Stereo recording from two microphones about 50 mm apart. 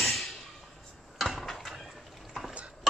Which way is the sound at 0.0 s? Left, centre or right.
Centre.